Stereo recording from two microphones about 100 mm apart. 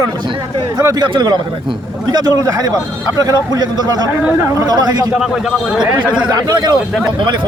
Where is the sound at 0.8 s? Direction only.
40° right (ahead or behind).